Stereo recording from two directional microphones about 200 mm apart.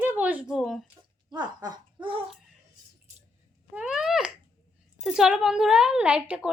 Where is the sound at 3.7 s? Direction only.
5° right (ahead or behind).